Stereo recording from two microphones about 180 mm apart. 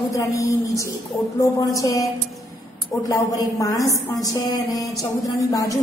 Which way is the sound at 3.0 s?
20° left (ahead or behind).